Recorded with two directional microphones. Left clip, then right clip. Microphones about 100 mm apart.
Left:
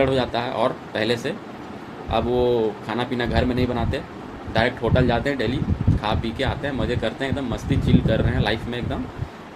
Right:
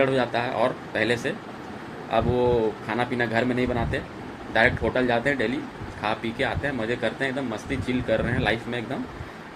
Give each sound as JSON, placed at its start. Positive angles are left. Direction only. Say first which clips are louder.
{"t": 0.0, "sound": "speech", "louder": "left 2 dB", "side_deg": 30}